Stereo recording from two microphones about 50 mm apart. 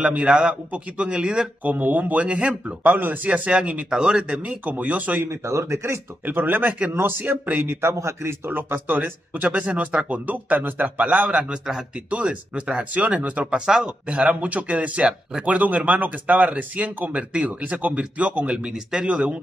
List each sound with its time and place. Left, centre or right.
0.0 s speech: right
1.6 s speech: right
2.8 s speech: right
3.3 s speech: right
5.3 s speech: right
6.2 s speech: right
7.8 s a man's voice: right
8.5 s speech: right
11.5 s speech: centre
12.1 s speech: right
13.7 s speech: centre
14.0 s speech: right
18.7 s speech: centre